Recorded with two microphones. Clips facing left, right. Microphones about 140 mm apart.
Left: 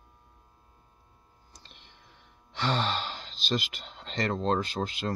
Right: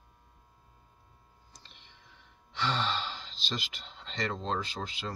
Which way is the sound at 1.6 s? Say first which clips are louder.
Left 4 dB; 50° left (ahead or behind).